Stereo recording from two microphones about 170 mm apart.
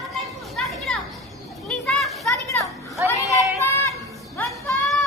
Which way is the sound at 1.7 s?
Centre (ahead or behind).